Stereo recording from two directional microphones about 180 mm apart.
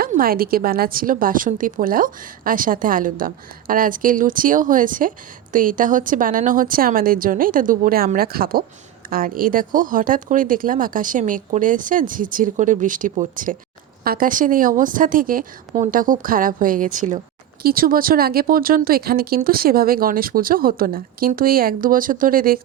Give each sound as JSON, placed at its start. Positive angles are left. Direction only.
{"t": 0.0, "sound": "a woman's voice", "side_deg": -55}